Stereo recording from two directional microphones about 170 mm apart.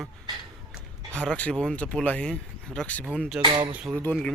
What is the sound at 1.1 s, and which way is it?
Speech, 5° left (ahead or behind).